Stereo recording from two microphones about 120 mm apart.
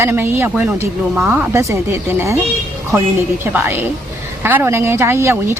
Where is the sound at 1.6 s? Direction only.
25° right (ahead or behind).